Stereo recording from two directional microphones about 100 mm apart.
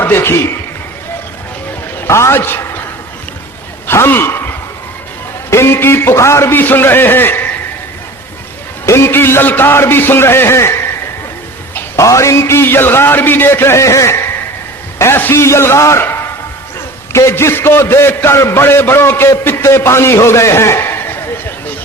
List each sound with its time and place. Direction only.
0.0 s a man's voice: 25° left (ahead or behind)
2.0 s a man's voice: 25° left (ahead or behind)
3.8 s a sound: 25° left (ahead or behind)
5.5 s a man's voice: 25° left (ahead or behind)
8.9 s a man's voice: 25° left (ahead or behind)
11.9 s a man's voice: 30° left (ahead or behind)